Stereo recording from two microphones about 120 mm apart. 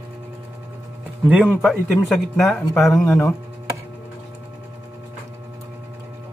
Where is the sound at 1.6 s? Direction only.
Centre (ahead or behind).